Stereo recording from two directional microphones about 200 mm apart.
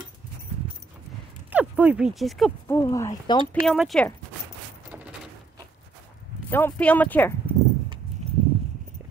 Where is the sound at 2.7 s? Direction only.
15° left (ahead or behind).